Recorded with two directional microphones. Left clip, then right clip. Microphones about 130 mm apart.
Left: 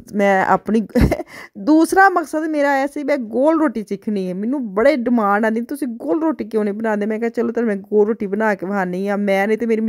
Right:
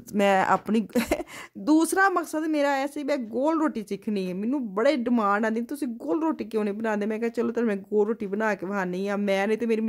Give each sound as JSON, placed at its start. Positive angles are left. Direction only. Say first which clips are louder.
{"t": 0.2, "sound": "a woman's voice", "louder": "left 6 dB", "side_deg": 35}